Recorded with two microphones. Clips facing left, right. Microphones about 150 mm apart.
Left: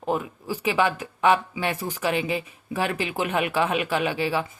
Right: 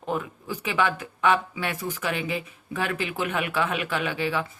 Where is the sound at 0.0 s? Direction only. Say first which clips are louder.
Left 3 dB; 15° left (ahead or behind).